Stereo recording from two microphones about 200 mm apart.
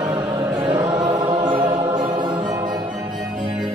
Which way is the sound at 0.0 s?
20° right (ahead or behind).